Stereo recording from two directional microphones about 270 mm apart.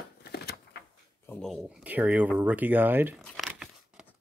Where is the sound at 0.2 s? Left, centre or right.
Left.